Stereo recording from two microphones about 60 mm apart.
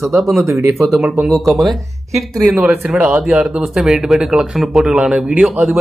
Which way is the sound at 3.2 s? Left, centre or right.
Centre.